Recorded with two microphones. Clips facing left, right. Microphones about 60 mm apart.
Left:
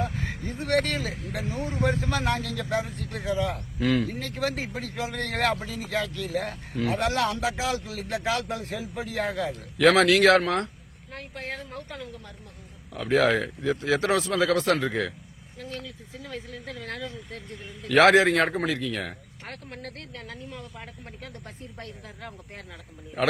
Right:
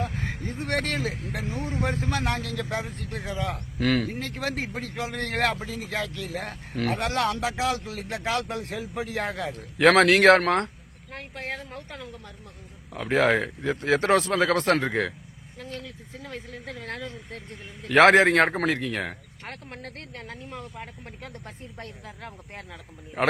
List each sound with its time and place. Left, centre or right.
0.0 s vehicle: right
0.5 s speech: right
2.1 s a man's voice: right
4.2 s a man's voice: right
12.9 s speech: right